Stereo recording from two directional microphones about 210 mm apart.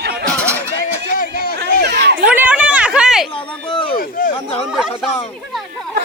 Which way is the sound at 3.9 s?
40° left (ahead or behind).